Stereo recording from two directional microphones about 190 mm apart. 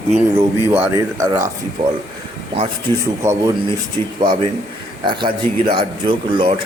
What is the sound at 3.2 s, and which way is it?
Speech, 35° right (ahead or behind).